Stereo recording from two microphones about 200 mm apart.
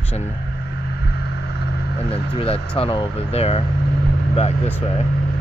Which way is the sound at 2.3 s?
30° left (ahead or behind).